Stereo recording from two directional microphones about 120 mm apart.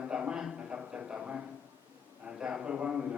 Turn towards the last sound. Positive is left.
turn(degrees=-10)  # may be behind; listen again after turning